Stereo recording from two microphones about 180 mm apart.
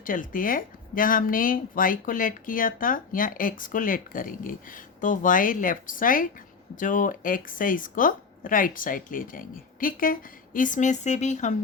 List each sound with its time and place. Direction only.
0.0 s speech: 50° left (ahead or behind)